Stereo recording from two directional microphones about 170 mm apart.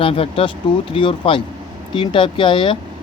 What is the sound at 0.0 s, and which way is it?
Speech, 35° left (ahead or behind).